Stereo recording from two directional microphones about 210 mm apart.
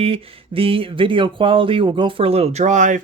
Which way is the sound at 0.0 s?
25° right (ahead or behind).